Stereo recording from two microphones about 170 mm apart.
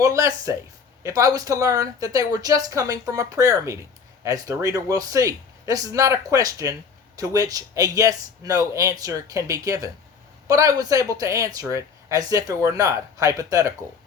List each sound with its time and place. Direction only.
0.0 s speech: 20° right (ahead or behind)